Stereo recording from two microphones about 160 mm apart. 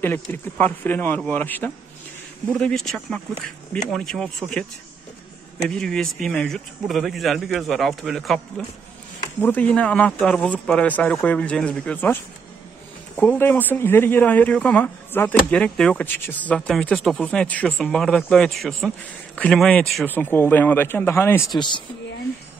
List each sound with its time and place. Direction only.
0.0 s speech: 10° left (ahead or behind)
20.1 s speech: 15° left (ahead or behind)
21.5 s speech: 30° left (ahead or behind)